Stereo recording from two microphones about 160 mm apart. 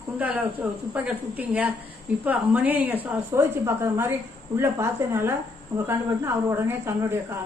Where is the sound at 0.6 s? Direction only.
5° right (ahead or behind).